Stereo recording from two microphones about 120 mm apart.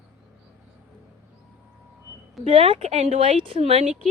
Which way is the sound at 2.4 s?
55° right (ahead or behind).